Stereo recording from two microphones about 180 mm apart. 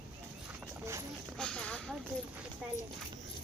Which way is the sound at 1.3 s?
5° left (ahead or behind).